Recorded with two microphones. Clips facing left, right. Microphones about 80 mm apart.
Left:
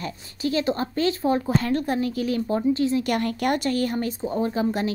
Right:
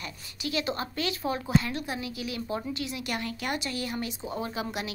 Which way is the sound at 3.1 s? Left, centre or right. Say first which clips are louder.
Left 9 dB; left.